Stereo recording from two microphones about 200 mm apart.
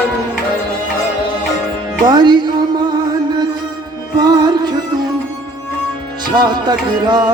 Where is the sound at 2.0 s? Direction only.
20° right (ahead or behind).